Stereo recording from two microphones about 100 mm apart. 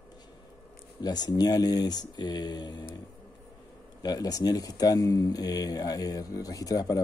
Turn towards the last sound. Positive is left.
turn(degrees=40)  # may be behind; listen again after turning